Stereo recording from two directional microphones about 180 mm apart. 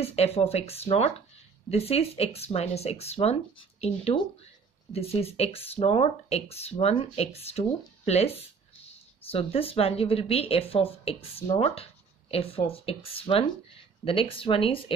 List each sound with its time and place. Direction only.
0.0 s speech: 35° left (ahead or behind)